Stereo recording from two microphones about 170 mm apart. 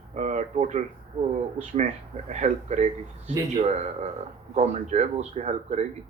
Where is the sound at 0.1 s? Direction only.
45° right (ahead or behind).